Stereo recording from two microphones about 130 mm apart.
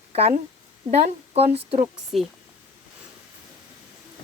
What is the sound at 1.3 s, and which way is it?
Speech, 55° right (ahead or behind).